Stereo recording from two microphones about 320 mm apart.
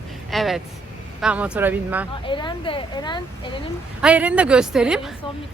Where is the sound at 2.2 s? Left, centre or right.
Centre.